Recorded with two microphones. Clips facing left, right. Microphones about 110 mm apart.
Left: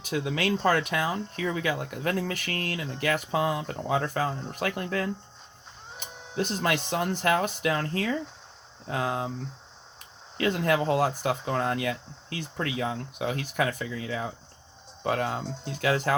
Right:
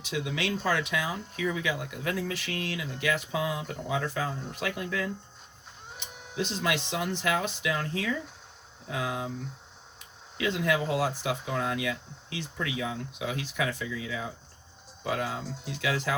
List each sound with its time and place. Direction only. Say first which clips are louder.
0.0 s speech: left 3 dB; 45° left (ahead or behind)
10.3 s speech: left 3 dB; 45° left (ahead or behind)
15.2 s speech: left 3 dB; 35° left (ahead or behind)
15.8 s speech: left 5 dB; 50° left (ahead or behind)